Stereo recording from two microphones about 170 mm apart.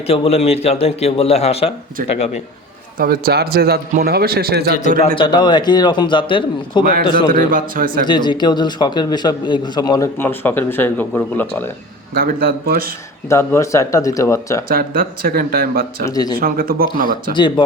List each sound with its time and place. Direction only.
0.1 s a man's voice: 35° left (ahead or behind)
3.0 s a man's voice: 60° right (ahead or behind)
4.9 s a man's voice: 30° left (ahead or behind)
7.3 s a man's voice: 55° right (ahead or behind)
8.0 s a man's voice: 25° left (ahead or behind); by 11.7 s 10° left (ahead or behind)
12.1 s a man's voice: 60° right (ahead or behind)
13.2 s speech: 15° left (ahead or behind)
14.7 s a man's voice: 60° right (ahead or behind)
16.0 s a man's voice: 20° left (ahead or behind)
16.4 s a man's voice: 60° right (ahead or behind)
17.3 s a man's voice: 30° left (ahead or behind)